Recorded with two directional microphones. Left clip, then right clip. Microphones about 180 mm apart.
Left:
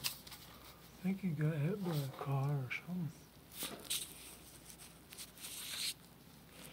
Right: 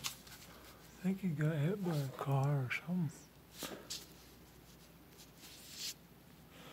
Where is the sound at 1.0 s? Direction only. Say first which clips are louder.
Right 1 dB; 15° right (ahead or behind).